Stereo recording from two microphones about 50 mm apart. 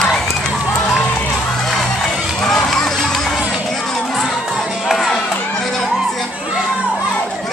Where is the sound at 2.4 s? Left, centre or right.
Centre.